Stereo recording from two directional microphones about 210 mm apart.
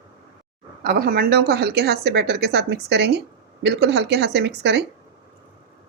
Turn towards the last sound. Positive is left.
turn(degrees=-55)  # may be behind; listen again after turning